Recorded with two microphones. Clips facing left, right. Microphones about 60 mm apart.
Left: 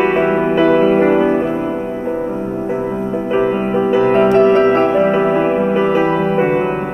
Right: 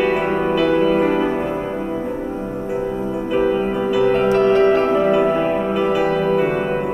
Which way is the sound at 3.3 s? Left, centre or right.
Left.